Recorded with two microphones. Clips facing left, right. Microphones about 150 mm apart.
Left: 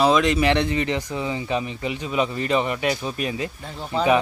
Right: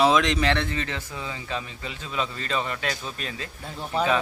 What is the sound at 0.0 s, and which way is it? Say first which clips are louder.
Speech: left 2 dB; centre (ahead or behind).